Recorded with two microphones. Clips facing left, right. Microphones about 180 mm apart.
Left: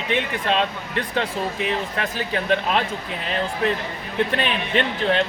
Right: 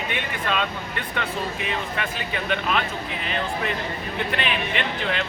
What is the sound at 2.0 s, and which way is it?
Speech, 35° left (ahead or behind).